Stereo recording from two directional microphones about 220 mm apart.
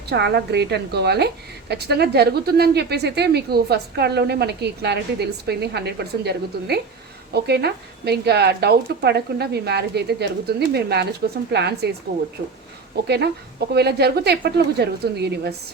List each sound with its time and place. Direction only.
0.1 s a woman's voice: 50° right (ahead or behind)